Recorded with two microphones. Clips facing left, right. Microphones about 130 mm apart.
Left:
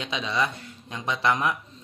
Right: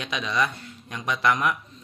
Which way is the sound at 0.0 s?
25° left (ahead or behind).